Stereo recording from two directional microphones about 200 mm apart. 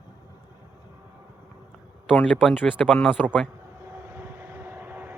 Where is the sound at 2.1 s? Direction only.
5° left (ahead or behind).